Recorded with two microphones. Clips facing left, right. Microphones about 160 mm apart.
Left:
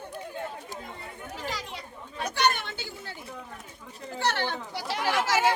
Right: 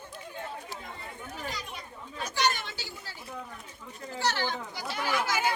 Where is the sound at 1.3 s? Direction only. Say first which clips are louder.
Left 4 dB; 90° left; by 3.1 s 55° left (ahead or behind).